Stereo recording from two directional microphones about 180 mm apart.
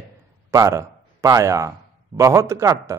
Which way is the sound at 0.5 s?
15° right (ahead or behind).